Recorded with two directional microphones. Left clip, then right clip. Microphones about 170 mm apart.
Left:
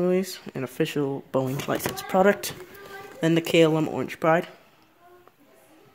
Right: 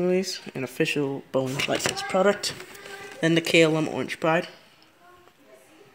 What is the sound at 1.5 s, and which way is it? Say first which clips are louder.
Speech: right 3 dB; 30° left (ahead or behind).